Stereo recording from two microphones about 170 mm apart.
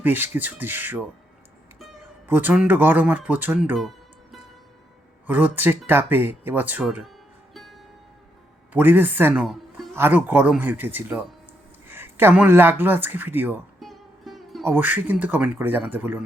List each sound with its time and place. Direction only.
0.0 s speech: 10° right (ahead or behind)
2.2 s speech: 10° right (ahead or behind)
3.8 s music: centre (ahead or behind)
5.2 s speech: 10° right (ahead or behind)
7.5 s music: centre (ahead or behind)
8.7 s speech: 10° right (ahead or behind)
13.7 s music: centre (ahead or behind)
14.6 s speech: 10° right (ahead or behind)